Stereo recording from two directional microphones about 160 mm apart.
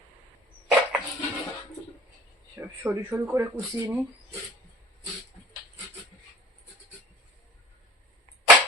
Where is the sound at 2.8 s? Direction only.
10° right (ahead or behind).